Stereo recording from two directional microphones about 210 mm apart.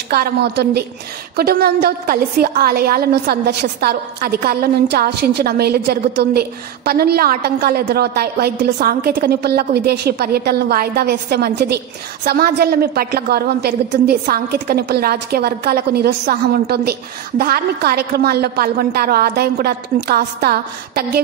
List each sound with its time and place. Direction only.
0.1 s a woman's voice: 50° right (ahead or behind)